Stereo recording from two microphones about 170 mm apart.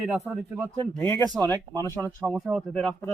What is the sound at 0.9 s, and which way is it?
Speech, 15° left (ahead or behind).